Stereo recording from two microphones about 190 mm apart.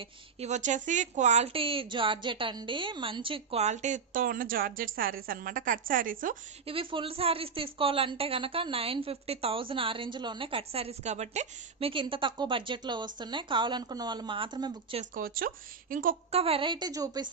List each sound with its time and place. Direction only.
0.0 s a woman's voice: 35° right (ahead or behind)
6.7 s a woman's voice: 30° right (ahead or behind)
15.1 s speech: 50° right (ahead or behind)
16.3 s a woman's voice: 30° right (ahead or behind)